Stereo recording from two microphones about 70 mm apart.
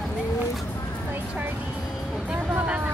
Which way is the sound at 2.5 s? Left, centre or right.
Centre.